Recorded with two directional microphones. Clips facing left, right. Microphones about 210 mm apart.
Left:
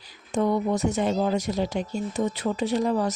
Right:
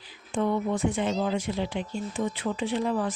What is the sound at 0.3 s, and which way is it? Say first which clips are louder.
Speech: left 3 dB; 40° left (ahead or behind).